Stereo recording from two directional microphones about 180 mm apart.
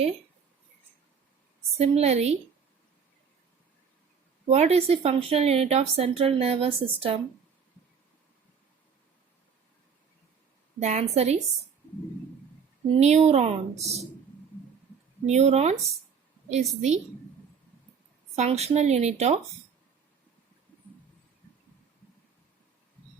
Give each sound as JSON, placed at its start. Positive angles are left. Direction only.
{"t": 1.7, "sound": "a woman's voice", "side_deg": -35}
{"t": 4.4, "sound": "a woman's voice", "side_deg": -35}
{"t": 10.8, "sound": "a woman's voice", "side_deg": -40}
{"t": 13.0, "sound": "a woman's voice", "side_deg": -40}
{"t": 15.3, "sound": "a woman's voice", "side_deg": -40}
{"t": 18.3, "sound": "a woman's voice", "side_deg": -35}